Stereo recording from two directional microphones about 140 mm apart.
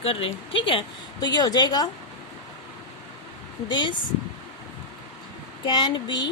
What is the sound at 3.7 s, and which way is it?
Speech, 30° left (ahead or behind).